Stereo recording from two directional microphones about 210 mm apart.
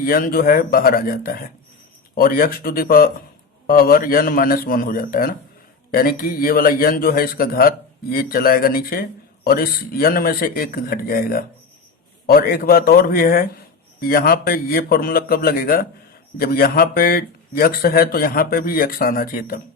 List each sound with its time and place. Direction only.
0.0 s speech: 45° left (ahead or behind)